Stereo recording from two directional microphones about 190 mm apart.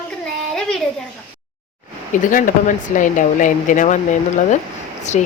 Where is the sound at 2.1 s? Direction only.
45° left (ahead or behind).